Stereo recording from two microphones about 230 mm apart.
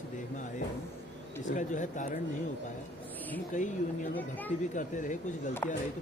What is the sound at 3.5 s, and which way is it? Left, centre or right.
Speech, left.